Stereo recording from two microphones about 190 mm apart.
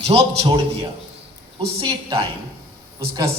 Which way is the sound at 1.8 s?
25° right (ahead or behind).